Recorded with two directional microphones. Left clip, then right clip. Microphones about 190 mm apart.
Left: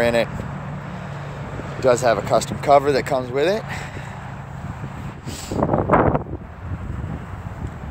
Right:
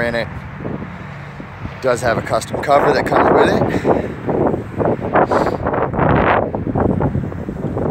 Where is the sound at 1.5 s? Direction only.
55° left (ahead or behind).